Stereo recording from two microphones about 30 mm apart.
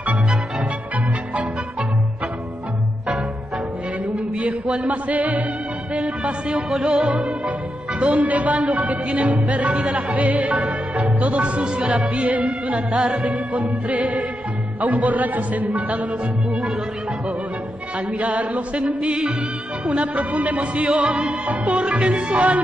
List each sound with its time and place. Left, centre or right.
4.8 s music: right
5.9 s music: right
6.8 s music: right
7.1 s music: right
8.0 s music: right
12.7 s music: right
16.4 s music: right
17.9 s music: right